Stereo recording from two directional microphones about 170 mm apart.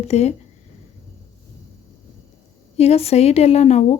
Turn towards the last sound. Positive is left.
turn(degrees=40)  # may be behind; listen again after turning